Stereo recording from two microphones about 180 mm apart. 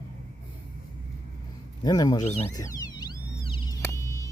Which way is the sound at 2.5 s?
20° left (ahead or behind).